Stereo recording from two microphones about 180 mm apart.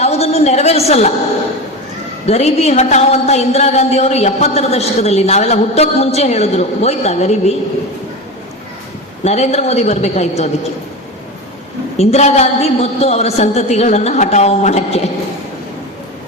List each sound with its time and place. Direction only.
0.0 s a sound: 35° left (ahead or behind)
2.2 s a woman's voice: 35° left (ahead or behind)
9.2 s a woman's voice: 35° left (ahead or behind)
11.9 s a woman's voice: 35° left (ahead or behind)